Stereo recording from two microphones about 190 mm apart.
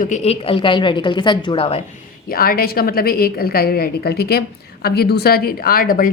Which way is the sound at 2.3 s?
50° left (ahead or behind).